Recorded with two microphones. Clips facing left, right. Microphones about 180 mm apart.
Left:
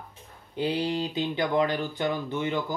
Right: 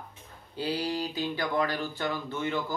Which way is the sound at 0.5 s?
20° left (ahead or behind).